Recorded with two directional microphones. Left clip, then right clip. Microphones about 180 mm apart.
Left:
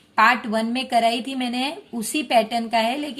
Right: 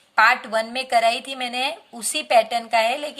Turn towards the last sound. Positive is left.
turn(degrees=-25)  # may be behind; listen again after turning